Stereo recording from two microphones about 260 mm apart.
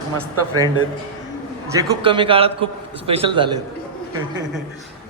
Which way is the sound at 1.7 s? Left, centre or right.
Centre.